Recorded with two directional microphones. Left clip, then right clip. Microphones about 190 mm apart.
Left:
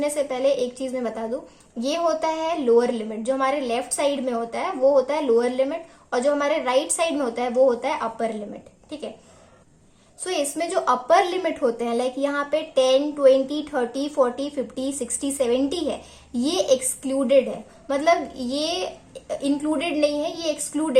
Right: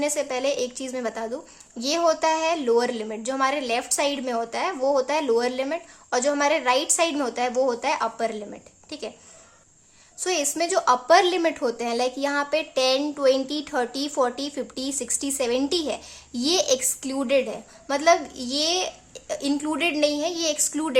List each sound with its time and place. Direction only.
0.0 s a woman's voice: 15° right (ahead or behind)
10.2 s a woman's voice: 15° right (ahead or behind)